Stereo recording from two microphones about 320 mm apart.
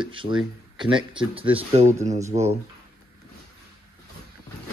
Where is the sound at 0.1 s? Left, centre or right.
Centre.